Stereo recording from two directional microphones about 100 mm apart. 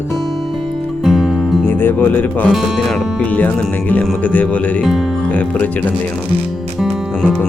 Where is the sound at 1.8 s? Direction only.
20° left (ahead or behind).